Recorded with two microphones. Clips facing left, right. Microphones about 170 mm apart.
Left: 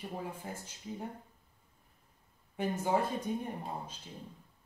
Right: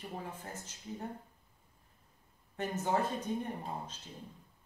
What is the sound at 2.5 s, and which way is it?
Speech, 10° left (ahead or behind).